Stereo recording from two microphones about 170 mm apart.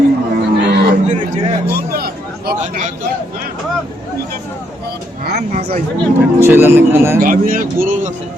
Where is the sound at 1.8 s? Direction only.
65° right (ahead or behind).